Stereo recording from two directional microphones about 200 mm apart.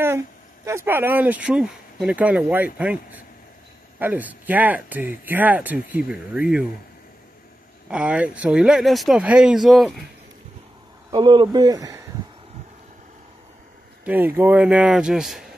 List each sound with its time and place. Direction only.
0.7 s speech: 10° right (ahead or behind)
7.9 s speech: 5° right (ahead or behind)
11.1 s speech: 20° right (ahead or behind)
14.0 s speech: 10° right (ahead or behind)